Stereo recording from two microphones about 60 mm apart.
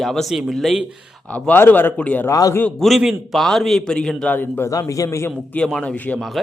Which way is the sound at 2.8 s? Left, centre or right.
Centre.